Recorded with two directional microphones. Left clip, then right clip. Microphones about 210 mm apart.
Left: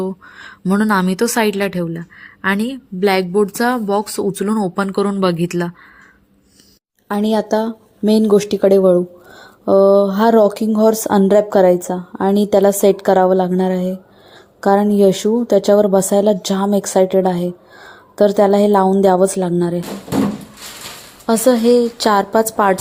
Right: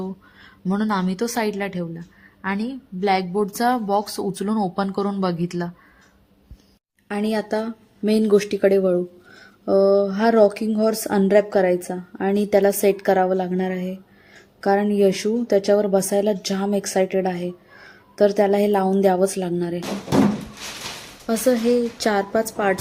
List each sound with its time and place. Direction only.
0.0 s a woman's voice: 25° left (ahead or behind)
7.1 s a woman's voice: 20° left (ahead or behind)
21.2 s speech: centre (ahead or behind)